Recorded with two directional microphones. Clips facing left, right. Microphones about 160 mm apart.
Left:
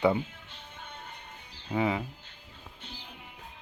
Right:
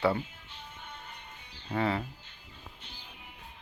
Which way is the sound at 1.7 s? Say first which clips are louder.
Left 2 dB; 15° left (ahead or behind).